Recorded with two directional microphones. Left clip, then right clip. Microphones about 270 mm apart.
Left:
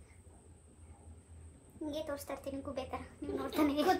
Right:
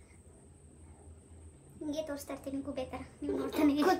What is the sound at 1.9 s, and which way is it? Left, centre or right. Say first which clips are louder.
Speech: right 2 dB; centre.